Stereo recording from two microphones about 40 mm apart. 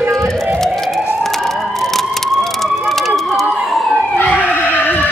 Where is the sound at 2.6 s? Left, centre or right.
Centre.